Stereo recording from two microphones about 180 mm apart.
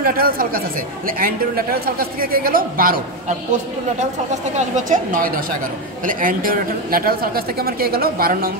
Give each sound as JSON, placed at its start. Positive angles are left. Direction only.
{"t": 0.0, "sound": "a woman's voice", "side_deg": -55}